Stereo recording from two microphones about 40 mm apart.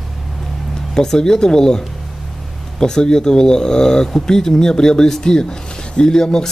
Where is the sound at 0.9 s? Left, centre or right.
Centre.